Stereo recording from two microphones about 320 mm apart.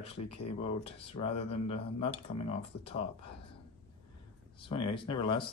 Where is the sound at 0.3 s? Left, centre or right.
Centre.